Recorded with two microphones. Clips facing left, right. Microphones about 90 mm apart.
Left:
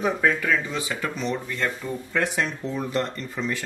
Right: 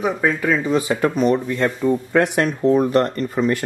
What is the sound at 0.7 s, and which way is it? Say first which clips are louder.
Speech: right 11 dB; 50° right (ahead or behind).